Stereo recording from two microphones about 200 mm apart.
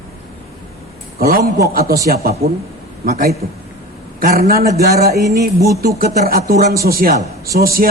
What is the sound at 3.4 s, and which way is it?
A man's voice, 50° right (ahead or behind).